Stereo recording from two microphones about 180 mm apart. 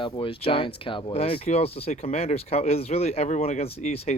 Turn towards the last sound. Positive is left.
turn(degrees=35)  # may be behind; listen again after turning